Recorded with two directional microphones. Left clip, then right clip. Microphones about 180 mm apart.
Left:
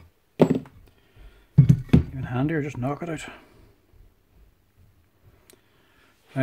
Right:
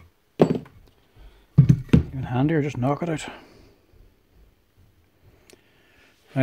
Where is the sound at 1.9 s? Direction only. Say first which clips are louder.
Right 1 dB; 15° right (ahead or behind).